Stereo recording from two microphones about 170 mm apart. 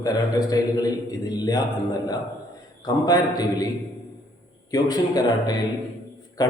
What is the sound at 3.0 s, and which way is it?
Speech, 20° left (ahead or behind).